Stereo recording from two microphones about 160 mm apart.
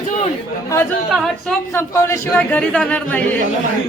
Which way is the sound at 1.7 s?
15° left (ahead or behind).